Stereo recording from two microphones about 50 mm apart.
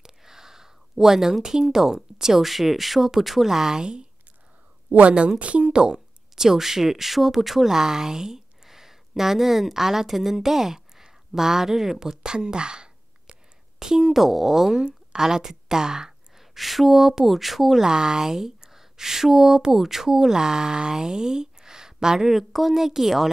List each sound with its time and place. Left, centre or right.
0.0 s a woman's voice: centre